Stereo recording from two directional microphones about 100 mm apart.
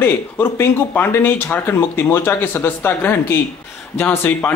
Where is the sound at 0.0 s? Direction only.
20° left (ahead or behind).